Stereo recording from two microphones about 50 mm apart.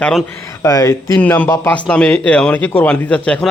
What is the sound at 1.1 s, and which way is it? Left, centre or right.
Speech, left.